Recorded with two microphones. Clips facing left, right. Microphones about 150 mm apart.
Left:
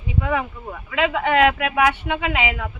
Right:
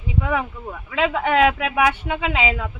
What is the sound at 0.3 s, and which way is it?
A woman's voice, 5° right (ahead or behind).